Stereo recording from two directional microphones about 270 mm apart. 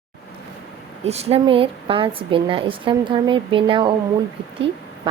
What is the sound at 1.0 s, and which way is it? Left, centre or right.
Speech, right.